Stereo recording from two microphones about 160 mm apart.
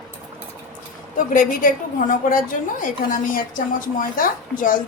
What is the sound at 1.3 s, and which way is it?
A woman's voice, 55° left (ahead or behind).